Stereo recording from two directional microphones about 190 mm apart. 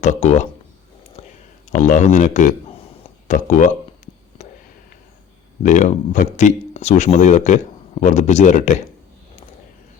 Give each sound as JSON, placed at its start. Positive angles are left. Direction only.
{"t": 0.0, "sound": "speech", "side_deg": 35}
{"t": 1.7, "sound": "speech", "side_deg": 40}
{"t": 5.6, "sound": "speech", "side_deg": 40}